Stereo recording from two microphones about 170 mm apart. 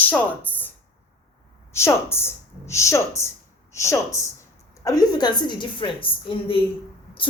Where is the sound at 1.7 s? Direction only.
15° left (ahead or behind).